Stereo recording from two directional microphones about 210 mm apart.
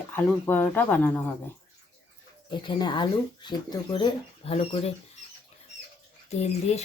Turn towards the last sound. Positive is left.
turn(degrees=30)  # may be behind; listen again after turning